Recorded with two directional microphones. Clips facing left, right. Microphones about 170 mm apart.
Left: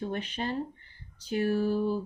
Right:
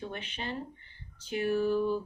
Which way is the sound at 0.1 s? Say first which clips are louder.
Left 6 dB; 40° left (ahead or behind).